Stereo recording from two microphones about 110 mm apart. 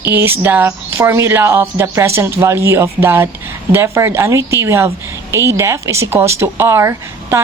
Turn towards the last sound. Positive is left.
turn(degrees=-25)  # may be behind; listen again after turning